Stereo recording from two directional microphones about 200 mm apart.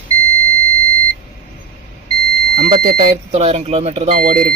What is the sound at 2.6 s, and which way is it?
Smoke detector, 35° right (ahead or behind).